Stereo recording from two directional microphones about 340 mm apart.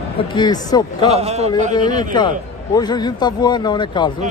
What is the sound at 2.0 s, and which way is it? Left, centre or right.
A man's voice, centre.